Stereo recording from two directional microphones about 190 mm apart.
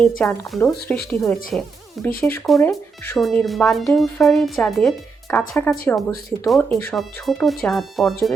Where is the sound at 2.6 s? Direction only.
10° left (ahead or behind).